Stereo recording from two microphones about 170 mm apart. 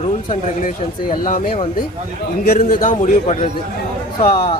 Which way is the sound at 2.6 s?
50° left (ahead or behind).